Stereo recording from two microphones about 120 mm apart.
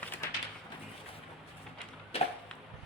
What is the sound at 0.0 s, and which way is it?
Bird, 15° left (ahead or behind).